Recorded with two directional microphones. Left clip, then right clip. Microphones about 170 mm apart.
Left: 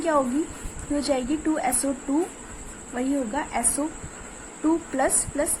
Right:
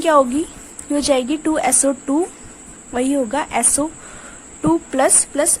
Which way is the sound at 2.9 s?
70° right (ahead or behind).